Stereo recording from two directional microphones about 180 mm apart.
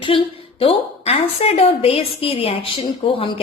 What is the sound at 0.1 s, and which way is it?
A woman's voice, 30° left (ahead or behind).